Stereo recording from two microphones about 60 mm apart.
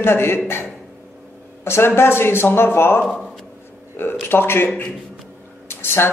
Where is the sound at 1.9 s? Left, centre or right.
Left.